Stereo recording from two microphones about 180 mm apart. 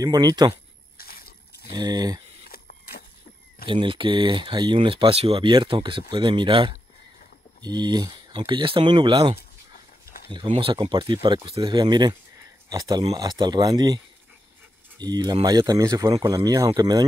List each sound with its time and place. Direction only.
0.0 s speech: 20° right (ahead or behind)
0.9 s a sound: 55° left (ahead or behind)
1.7 s speech: 20° right (ahead or behind)
2.5 s printer: 55° left (ahead or behind)
3.6 s speech: 30° right (ahead or behind)